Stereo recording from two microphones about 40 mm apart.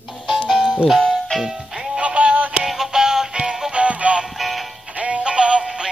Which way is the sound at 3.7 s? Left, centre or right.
Right.